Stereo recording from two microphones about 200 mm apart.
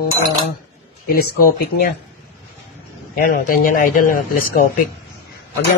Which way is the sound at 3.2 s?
45° left (ahead or behind).